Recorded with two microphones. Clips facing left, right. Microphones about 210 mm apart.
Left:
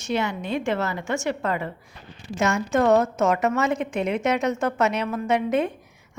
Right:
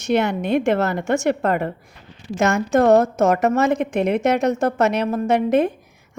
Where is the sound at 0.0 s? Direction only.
70° right (ahead or behind).